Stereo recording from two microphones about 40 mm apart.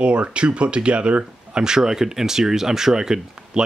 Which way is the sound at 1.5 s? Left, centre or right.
Centre.